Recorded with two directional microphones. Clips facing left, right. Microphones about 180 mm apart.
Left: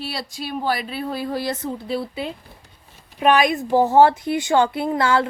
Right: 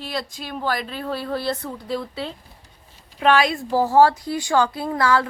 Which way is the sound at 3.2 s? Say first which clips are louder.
Left 1 dB; 20° left (ahead or behind).